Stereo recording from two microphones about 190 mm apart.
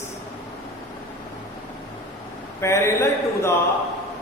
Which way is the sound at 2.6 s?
15° left (ahead or behind).